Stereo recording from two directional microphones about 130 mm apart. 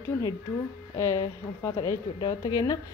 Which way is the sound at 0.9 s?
20° left (ahead or behind).